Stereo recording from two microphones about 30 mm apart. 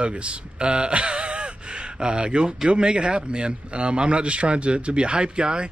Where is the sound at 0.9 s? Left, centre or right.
Right.